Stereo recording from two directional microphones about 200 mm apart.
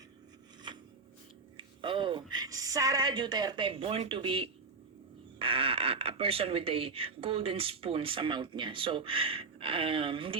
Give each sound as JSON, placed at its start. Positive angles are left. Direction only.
{"t": 1.5, "sound": "speech", "side_deg": -25}